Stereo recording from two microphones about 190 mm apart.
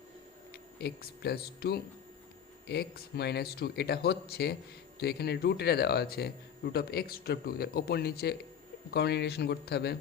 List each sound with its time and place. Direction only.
0.5 s a man's voice: 60° left (ahead or behind)